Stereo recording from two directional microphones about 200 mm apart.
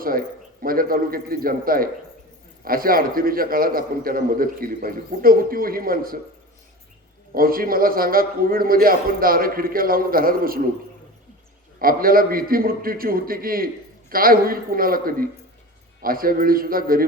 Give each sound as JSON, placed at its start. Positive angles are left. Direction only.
{"t": 0.0, "sound": "a man's voice", "side_deg": -45}
{"t": 7.3, "sound": "a man's voice", "side_deg": -45}
{"t": 11.8, "sound": "a man's voice", "side_deg": -45}